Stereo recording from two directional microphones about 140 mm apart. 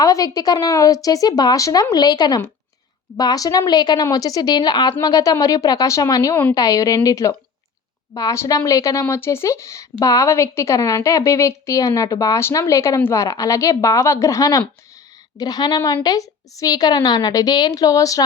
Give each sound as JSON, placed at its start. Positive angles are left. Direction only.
{"t": 0.0, "sound": "a woman's voice", "side_deg": 25}